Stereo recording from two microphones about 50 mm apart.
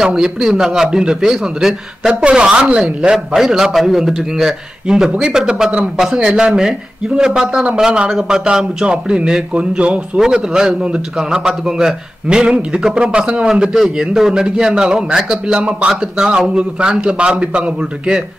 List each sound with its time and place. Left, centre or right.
0.0 s a man's voice: centre
8.1 s a man's voice: centre
8.5 s a man's voice: centre